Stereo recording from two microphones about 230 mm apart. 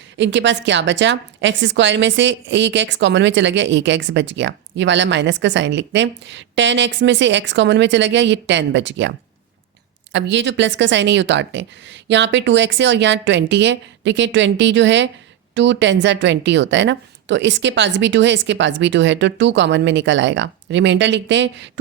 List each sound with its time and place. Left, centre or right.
0.2 s a woman's voice: right